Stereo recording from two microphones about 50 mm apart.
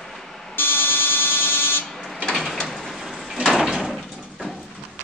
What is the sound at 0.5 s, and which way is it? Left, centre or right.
Buzzer, left.